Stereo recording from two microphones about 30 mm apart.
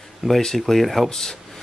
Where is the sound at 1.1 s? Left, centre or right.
Centre.